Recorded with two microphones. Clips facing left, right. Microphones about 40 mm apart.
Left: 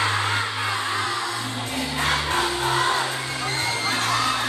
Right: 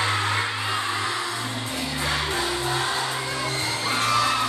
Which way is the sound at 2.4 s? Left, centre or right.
Left.